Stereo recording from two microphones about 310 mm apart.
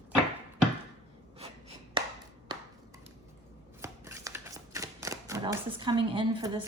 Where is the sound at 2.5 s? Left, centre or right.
Centre.